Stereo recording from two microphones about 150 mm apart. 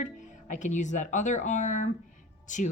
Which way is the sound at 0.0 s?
55° left (ahead or behind).